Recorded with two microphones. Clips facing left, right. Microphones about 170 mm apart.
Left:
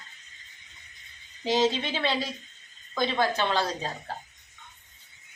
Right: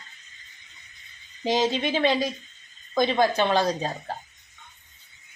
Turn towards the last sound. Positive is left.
turn(degrees=-15)  # may be behind; listen again after turning